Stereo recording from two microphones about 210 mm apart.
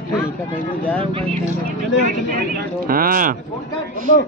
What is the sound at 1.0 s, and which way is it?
Speech, 25° right (ahead or behind).